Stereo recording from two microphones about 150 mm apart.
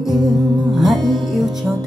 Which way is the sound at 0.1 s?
25° right (ahead or behind).